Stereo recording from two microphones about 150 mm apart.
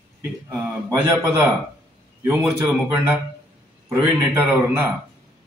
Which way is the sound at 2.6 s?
15° right (ahead or behind).